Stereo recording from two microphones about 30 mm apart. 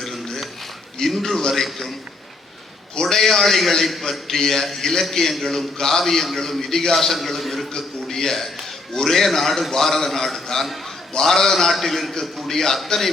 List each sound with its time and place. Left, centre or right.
1.0 s a man's voice: centre
3.2 s a man's voice: centre
6.0 s a man's voice: centre
7.8 s a man's voice: centre